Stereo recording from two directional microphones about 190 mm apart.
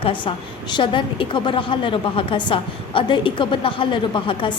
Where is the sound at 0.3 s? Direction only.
30° left (ahead or behind).